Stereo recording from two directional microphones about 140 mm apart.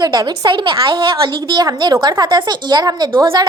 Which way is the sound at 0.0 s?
30° right (ahead or behind).